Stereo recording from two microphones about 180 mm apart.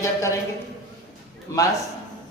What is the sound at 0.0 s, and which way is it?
Speech, 15° left (ahead or behind).